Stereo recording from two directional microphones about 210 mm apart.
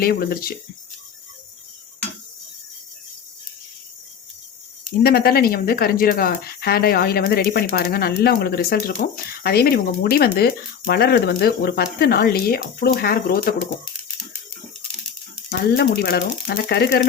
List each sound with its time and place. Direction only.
0.0 s speech: 45° left (ahead or behind)
5.0 s speech: 45° left (ahead or behind)
15.4 s speech: 45° left (ahead or behind)